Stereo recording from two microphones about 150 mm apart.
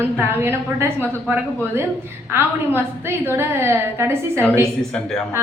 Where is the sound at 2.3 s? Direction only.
15° right (ahead or behind).